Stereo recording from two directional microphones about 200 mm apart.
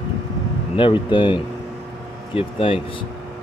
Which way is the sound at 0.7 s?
25° left (ahead or behind).